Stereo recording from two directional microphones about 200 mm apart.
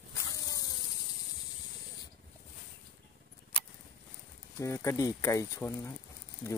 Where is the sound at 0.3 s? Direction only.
20° left (ahead or behind).